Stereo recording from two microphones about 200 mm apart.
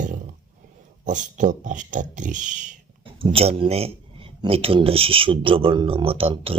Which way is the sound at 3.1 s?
25° right (ahead or behind).